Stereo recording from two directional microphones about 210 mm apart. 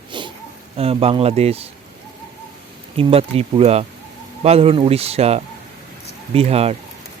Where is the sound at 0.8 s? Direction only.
30° right (ahead or behind).